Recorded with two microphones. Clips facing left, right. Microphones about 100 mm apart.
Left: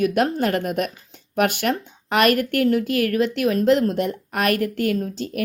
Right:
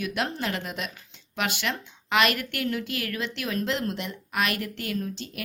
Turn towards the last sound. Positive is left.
turn(degrees=40)  # may be behind; listen again after turning